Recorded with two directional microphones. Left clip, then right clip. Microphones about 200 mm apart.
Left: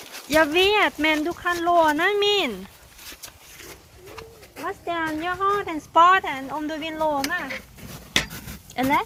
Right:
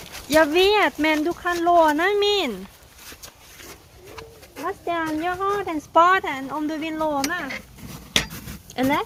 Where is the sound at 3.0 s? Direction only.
45° right (ahead or behind).